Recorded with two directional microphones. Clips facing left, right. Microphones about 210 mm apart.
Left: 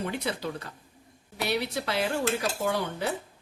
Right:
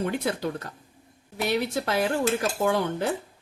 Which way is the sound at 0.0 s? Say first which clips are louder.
Right 4 dB; 50° right (ahead or behind).